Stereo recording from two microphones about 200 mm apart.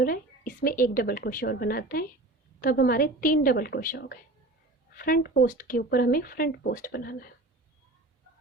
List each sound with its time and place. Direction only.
0.0 s a woman's voice: 45° left (ahead or behind)